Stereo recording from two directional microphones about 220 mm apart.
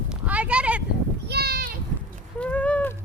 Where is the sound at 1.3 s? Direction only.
45° right (ahead or behind).